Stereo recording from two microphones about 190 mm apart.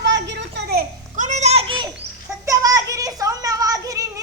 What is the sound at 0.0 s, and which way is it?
Children playing, 70° right (ahead or behind).